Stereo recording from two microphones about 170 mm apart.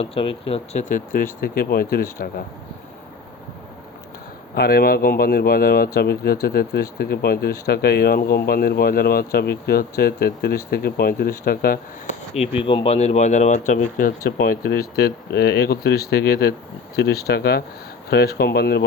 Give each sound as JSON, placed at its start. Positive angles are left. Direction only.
{"t": 0.0, "sound": "speech", "side_deg": 35}
{"t": 4.5, "sound": "speech", "side_deg": 65}
{"t": 12.0, "sound": "speech", "side_deg": 40}
{"t": 14.3, "sound": "speech", "side_deg": 65}